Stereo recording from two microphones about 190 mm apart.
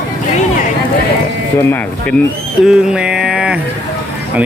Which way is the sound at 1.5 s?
10° left (ahead or behind).